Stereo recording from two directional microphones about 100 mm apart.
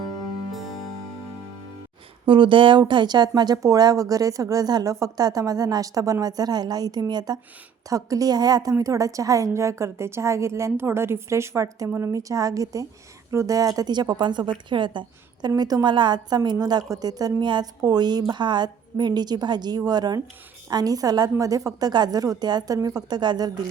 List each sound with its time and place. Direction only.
0.5 s music: centre (ahead or behind)
2.2 s a woman's voice: 55° right (ahead or behind)